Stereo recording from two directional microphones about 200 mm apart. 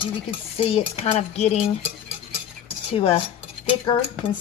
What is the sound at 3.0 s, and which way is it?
Cutlery, 25° left (ahead or behind).